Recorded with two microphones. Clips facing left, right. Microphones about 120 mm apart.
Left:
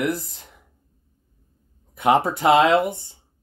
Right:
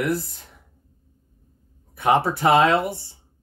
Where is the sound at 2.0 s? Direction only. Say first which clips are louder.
Left 1 dB; 20° left (ahead or behind).